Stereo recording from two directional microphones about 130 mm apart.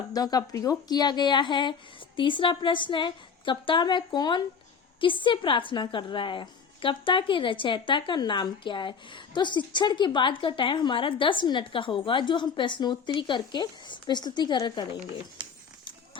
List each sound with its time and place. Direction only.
0.1 s a woman's voice: 30° left (ahead or behind)